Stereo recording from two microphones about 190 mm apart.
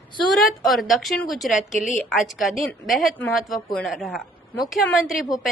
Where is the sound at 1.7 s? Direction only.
40° left (ahead or behind).